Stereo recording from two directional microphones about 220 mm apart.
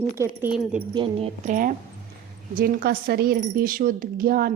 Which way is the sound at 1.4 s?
35° right (ahead or behind).